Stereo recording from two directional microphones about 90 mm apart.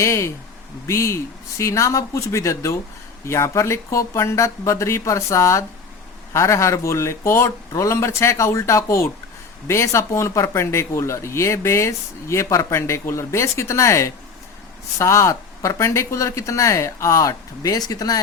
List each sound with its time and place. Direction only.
0.0 s speech: 35° left (ahead or behind)